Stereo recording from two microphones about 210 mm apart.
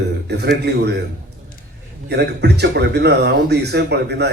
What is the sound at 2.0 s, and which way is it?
Speech, 55° right (ahead or behind).